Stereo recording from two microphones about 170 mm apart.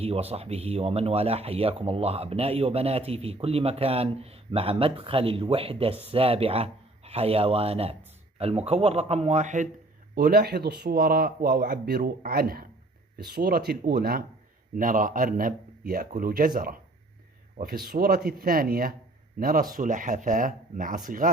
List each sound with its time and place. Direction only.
0.0 s speech: 35° right (ahead or behind)
10.2 s speech: 65° right (ahead or behind)